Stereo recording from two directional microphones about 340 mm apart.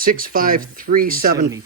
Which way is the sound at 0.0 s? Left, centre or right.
Right.